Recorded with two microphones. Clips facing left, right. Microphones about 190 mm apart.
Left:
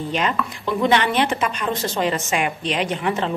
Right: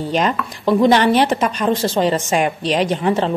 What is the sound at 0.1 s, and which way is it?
Speech, 40° right (ahead or behind).